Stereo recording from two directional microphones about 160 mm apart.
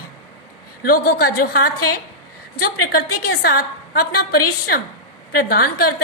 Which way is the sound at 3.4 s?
75° left (ahead or behind).